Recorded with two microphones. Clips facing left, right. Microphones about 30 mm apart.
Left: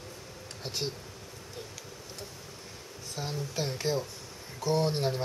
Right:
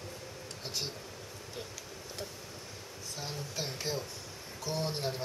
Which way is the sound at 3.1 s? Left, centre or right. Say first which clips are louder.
Left 5 dB; centre.